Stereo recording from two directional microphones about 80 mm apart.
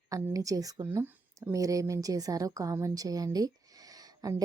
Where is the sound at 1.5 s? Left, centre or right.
Right.